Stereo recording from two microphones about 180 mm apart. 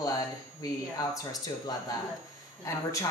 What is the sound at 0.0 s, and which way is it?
A woman's voice, 20° left (ahead or behind).